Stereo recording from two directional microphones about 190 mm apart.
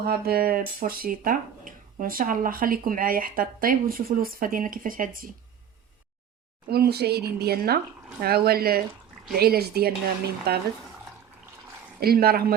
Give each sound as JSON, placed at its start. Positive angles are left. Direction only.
{"t": 0.0, "sound": "speech", "side_deg": -55}
{"t": 6.7, "sound": "speech", "side_deg": -55}
{"t": 11.9, "sound": "speech", "side_deg": -55}